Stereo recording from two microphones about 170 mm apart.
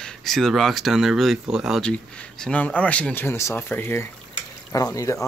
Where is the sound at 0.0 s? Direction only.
5° left (ahead or behind).